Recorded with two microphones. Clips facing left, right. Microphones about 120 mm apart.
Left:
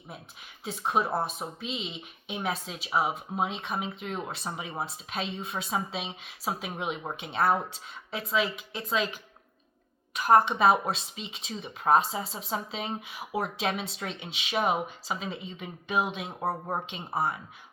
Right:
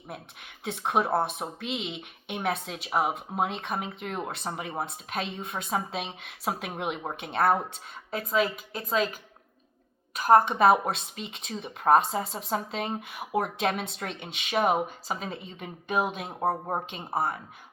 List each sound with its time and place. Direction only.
0.6 s speech: 65° right (ahead or behind); by 9.1 s 45° right (ahead or behind)
10.2 s a woman's voice: 40° right (ahead or behind)
10.6 s speech: 55° right (ahead or behind)
16.3 s speech: 20° right (ahead or behind)
17.2 s speech: 45° right (ahead or behind)